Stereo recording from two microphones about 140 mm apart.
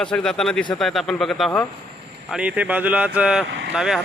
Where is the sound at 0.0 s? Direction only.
5° left (ahead or behind).